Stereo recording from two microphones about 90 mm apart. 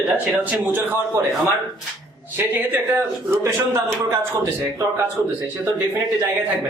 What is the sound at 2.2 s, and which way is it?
A man's voice, 20° right (ahead or behind).